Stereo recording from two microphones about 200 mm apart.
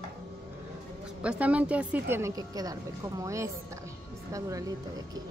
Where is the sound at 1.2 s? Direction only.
5° right (ahead or behind).